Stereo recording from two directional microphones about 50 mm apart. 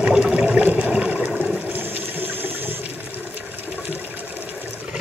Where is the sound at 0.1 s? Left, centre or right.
Right.